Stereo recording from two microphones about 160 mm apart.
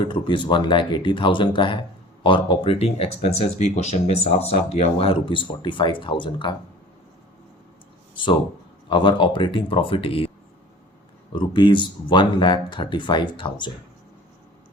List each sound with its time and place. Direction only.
0.0 s speech: 30° left (ahead or behind)
8.1 s speech: 30° left (ahead or behind)